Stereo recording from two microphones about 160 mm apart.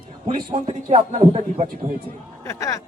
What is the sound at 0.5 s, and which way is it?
Speech, 40° right (ahead or behind).